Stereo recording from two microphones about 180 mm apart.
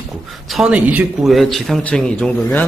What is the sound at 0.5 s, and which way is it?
A man's voice, 5° right (ahead or behind).